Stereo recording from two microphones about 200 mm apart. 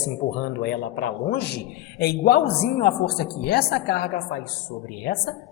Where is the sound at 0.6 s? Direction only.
55° left (ahead or behind).